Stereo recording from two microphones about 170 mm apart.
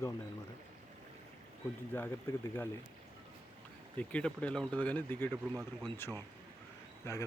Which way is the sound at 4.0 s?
10° left (ahead or behind).